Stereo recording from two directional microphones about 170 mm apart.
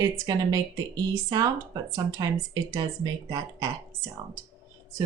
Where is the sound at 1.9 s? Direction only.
20° right (ahead or behind).